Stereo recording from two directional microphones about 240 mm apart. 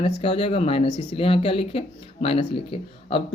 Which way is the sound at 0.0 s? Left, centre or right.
Left.